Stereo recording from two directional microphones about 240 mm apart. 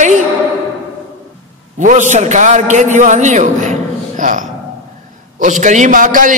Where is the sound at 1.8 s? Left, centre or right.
Right.